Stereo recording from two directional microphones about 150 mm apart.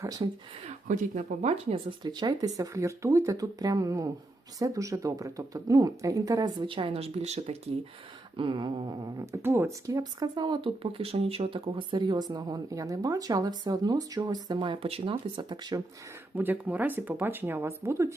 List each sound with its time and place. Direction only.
0.0 s speech: 25° right (ahead or behind)
0.9 s speech: 55° right (ahead or behind)
2.0 s speech: 30° right (ahead or behind)
16.3 s speech: 10° right (ahead or behind)